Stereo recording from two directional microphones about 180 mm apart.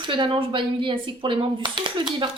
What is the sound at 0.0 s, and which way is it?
A woman's voice, 25° right (ahead or behind).